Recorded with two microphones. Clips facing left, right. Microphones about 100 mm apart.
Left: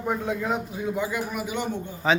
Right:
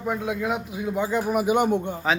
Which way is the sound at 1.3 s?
50° right (ahead or behind).